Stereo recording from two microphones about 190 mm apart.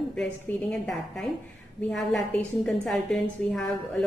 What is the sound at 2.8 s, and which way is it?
Speech, 5° left (ahead or behind).